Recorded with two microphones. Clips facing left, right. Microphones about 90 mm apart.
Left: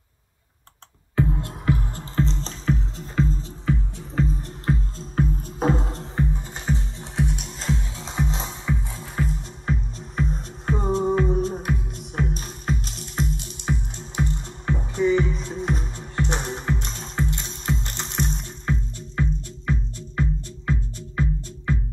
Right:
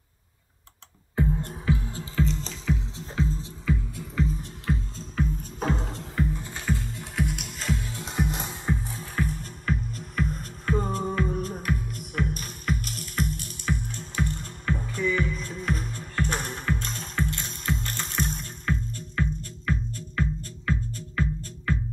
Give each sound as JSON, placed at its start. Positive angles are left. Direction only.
{"t": 1.1, "sound": "music", "side_deg": 90}
{"t": 1.9, "sound": "music", "side_deg": 40}
{"t": 6.3, "sound": "music", "side_deg": 20}
{"t": 8.0, "sound": "music", "side_deg": 90}
{"t": 8.9, "sound": "music", "side_deg": 30}
{"t": 12.8, "sound": "music", "side_deg": -50}
{"t": 13.7, "sound": "music", "side_deg": 20}